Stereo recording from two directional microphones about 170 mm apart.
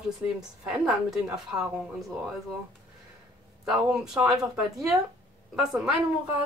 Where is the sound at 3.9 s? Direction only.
5° right (ahead or behind).